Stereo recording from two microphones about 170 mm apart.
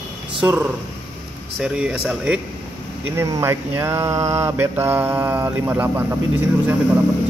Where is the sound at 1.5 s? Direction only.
5° right (ahead or behind).